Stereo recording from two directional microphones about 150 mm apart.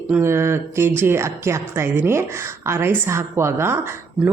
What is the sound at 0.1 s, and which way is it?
A woman's voice, 15° right (ahead or behind).